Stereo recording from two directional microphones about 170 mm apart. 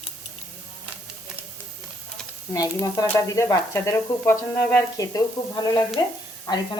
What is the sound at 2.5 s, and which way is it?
A woman's voice, 15° left (ahead or behind).